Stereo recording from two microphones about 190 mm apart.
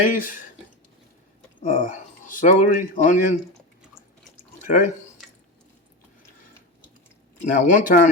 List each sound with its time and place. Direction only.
0.0 s speech: 45° left (ahead or behind)
1.6 s speech: 40° left (ahead or behind)
4.6 s speech: 45° left (ahead or behind)
7.4 s speech: 40° left (ahead or behind)